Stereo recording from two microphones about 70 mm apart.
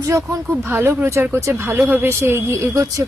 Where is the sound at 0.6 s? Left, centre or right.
Right.